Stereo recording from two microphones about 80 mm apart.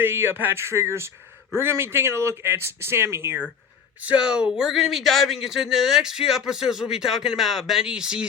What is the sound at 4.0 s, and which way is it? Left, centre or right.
Speech, centre.